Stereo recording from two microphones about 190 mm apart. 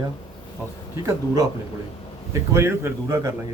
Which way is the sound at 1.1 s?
20° right (ahead or behind).